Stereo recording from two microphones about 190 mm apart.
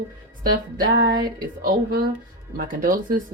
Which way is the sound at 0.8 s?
65° right (ahead or behind).